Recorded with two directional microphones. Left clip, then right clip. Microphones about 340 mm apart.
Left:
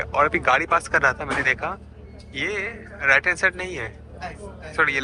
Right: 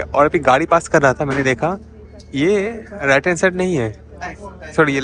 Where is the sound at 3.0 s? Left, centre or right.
Centre.